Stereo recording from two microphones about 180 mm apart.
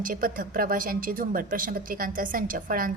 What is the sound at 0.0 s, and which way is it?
A woman's voice, 50° right (ahead or behind).